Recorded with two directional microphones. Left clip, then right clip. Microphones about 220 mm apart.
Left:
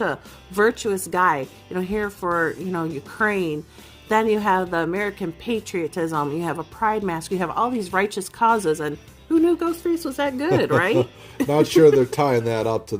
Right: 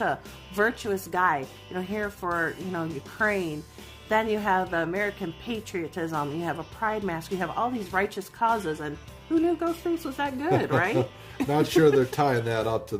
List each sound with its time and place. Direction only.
0.0 s a woman's voice: 20° left (ahead or behind)